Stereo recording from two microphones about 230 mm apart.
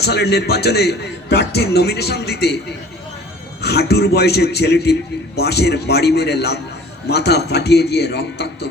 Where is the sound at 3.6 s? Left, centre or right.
Left.